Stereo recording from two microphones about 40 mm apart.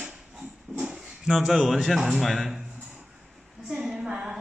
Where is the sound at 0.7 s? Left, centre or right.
Centre.